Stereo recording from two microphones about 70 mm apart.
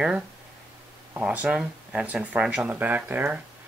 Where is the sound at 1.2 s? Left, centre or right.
Centre.